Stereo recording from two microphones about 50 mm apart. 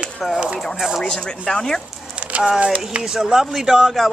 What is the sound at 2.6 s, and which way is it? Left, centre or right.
Speech, right.